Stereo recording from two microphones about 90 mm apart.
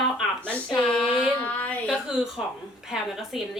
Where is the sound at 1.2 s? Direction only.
15° left (ahead or behind).